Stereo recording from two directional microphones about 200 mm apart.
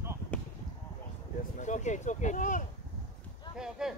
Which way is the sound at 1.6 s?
35° left (ahead or behind).